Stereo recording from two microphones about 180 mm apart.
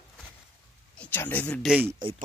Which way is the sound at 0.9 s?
10° left (ahead or behind).